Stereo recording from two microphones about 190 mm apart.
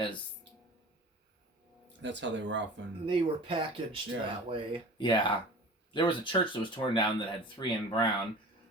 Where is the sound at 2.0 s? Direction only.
70° right (ahead or behind).